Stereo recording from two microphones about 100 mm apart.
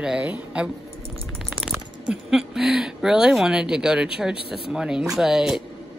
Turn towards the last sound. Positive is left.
turn(degrees=-5)  # may be behind; listen again after turning